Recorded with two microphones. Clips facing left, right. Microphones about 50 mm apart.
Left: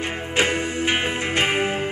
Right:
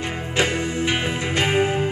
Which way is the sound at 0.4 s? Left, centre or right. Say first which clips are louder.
Even; left.